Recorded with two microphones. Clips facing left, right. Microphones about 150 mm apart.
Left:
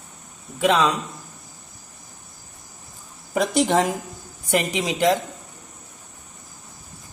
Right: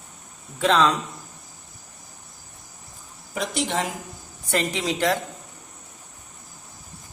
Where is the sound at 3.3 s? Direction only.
45° left (ahead or behind).